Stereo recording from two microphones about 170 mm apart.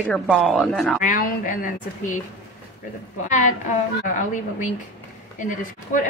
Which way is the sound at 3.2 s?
45° left (ahead or behind).